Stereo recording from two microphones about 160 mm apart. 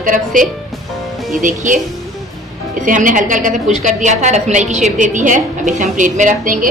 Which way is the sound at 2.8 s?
55° right (ahead or behind).